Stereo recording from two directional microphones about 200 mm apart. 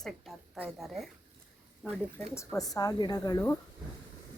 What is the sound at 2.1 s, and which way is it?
Speech, 10° left (ahead or behind).